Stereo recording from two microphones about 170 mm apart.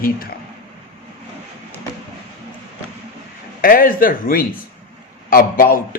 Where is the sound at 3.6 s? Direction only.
60° left (ahead or behind).